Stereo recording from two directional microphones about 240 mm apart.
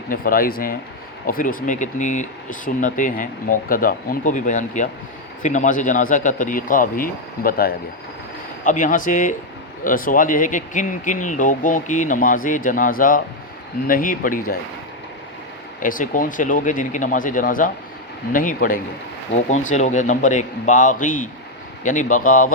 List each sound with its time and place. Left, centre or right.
0.1 s speech: left
15.8 s speech: left